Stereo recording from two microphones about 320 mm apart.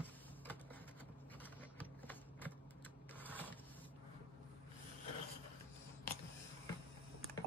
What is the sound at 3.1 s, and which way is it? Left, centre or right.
Printer, centre.